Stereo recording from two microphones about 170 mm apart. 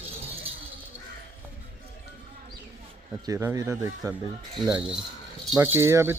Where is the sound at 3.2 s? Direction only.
20° right (ahead or behind).